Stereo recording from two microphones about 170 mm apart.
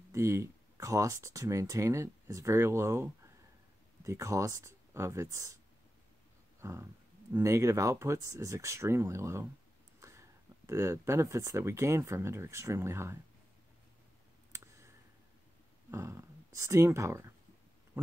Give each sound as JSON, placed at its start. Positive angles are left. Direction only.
{"t": 0.1, "sound": "speech", "side_deg": -15}
{"t": 6.6, "sound": "a sound", "side_deg": -15}
{"t": 7.3, "sound": "speech", "side_deg": -20}
{"t": 14.5, "sound": "clicking", "side_deg": -20}
{"t": 15.9, "sound": "speech", "side_deg": -15}
{"t": 17.9, "sound": "a sound", "side_deg": -10}